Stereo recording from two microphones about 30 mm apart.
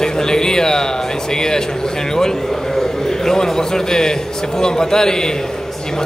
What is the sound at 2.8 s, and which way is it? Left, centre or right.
A man's voice, centre.